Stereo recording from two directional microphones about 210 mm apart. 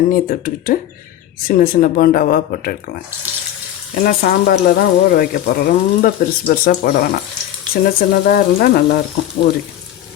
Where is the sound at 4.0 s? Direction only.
45° left (ahead or behind).